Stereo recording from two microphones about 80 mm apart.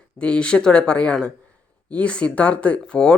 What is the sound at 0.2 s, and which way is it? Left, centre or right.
Speech, centre.